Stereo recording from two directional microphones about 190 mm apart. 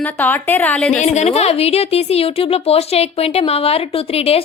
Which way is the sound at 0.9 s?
40° left (ahead or behind).